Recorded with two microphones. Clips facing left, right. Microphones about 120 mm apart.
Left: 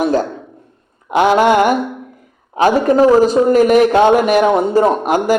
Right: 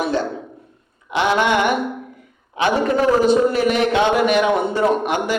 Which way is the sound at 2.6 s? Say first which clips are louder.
Left 6 dB; 40° left (ahead or behind).